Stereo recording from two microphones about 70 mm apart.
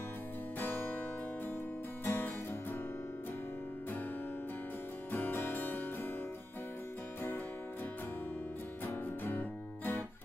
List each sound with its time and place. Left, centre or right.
0.6 s music: left
2.0 s music: left
5.1 s music: left
8.8 s music: left